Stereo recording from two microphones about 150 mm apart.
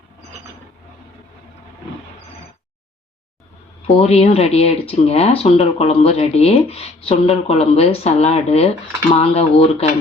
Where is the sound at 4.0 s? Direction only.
45° left (ahead or behind).